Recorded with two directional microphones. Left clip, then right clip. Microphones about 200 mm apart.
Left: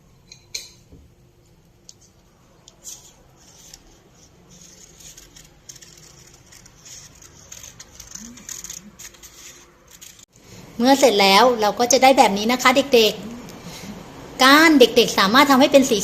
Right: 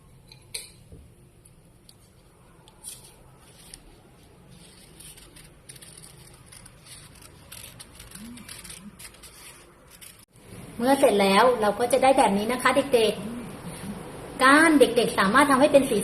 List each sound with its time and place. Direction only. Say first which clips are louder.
10.8 s a woman's voice: left 5 dB; 50° left (ahead or behind)
14.3 s a woman's voice: left 5 dB; 50° left (ahead or behind)